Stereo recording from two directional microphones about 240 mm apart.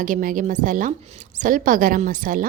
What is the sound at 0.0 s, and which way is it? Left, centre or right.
A woman's voice, right.